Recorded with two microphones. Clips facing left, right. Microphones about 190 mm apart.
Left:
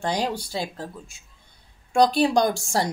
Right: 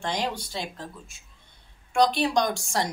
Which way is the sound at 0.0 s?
35° left (ahead or behind).